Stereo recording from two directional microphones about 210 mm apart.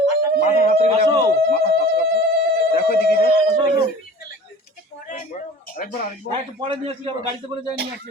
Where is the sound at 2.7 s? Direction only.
45° left (ahead or behind).